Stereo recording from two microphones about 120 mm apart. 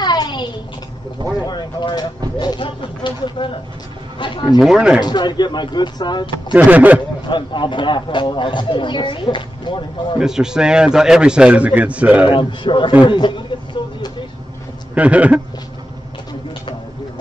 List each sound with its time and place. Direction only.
0.0 s a sound: 35° left (ahead or behind)
1.5 s a sound: 40° left (ahead or behind)
4.6 s a man's voice: 5° right (ahead or behind)
5.0 s speech: 35° left (ahead or behind)
6.5 s a man's voice: 15° right (ahead or behind)
7.2 s speech: 40° left (ahead or behind)
10.1 s a man's voice: 5° right (ahead or behind)
12.3 s a man's voice: 45° left (ahead or behind)
15.0 s a man's voice: 10° right (ahead or behind)